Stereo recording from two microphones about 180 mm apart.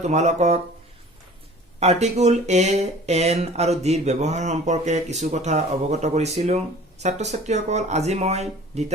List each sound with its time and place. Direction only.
0.0 s speech: 40° right (ahead or behind)
1.8 s speech: 35° right (ahead or behind)